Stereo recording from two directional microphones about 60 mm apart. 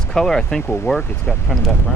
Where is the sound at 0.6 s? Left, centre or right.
Left.